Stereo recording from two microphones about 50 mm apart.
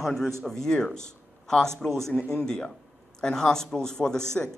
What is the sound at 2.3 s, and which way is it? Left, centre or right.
Speech, centre.